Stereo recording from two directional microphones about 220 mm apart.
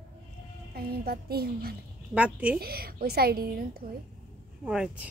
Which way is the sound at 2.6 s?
45° right (ahead or behind).